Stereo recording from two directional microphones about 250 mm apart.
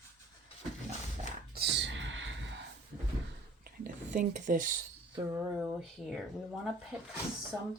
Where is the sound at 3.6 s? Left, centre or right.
Right.